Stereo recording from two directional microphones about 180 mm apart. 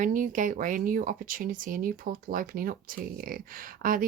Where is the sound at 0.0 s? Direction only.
45° right (ahead or behind).